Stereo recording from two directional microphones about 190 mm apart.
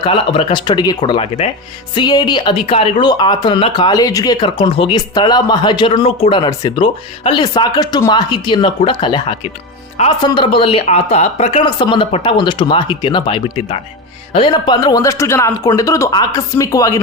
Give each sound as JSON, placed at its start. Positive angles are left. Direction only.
{"t": 0.0, "sound": "speech", "side_deg": 30}